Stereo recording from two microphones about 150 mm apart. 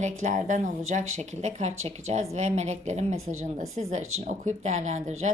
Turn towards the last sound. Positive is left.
turn(degrees=-50)  # may be behind; listen again after turning